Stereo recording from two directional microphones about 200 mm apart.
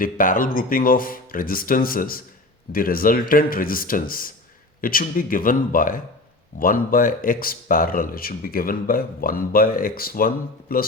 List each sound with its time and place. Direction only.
0.0 s speech: 45° left (ahead or behind)